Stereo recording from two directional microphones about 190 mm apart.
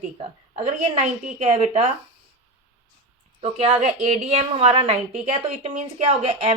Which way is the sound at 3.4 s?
35° right (ahead or behind).